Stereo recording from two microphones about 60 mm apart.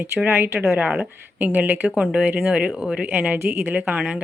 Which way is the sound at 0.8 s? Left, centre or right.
Right.